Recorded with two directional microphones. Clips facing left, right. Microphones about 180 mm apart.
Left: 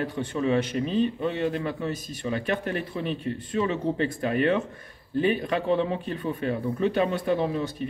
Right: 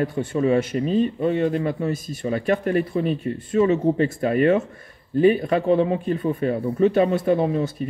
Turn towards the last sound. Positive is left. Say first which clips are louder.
# right 5 dB
turn(degrees=-40)  # may be behind; listen again after turning